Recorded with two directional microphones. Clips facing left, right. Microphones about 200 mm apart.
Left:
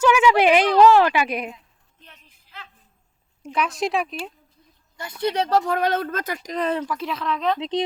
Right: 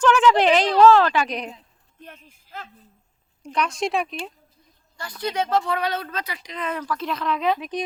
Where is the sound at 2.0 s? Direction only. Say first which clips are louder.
Right 9 dB; 50° right (ahead or behind).